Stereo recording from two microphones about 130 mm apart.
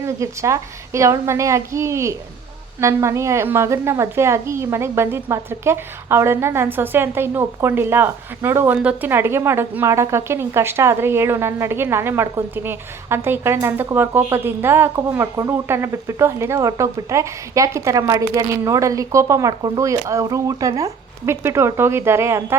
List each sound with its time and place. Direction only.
0.0 s a woman's voice: 25° right (ahead or behind)